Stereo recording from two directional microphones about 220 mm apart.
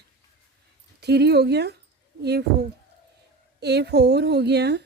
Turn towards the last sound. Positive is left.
turn(degrees=-50)  # may be behind; listen again after turning